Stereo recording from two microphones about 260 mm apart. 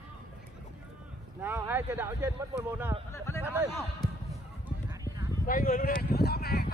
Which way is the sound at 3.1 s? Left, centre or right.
Centre.